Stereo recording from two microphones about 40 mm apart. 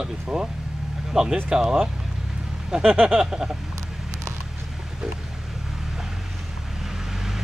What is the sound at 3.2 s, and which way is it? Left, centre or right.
Speech, centre.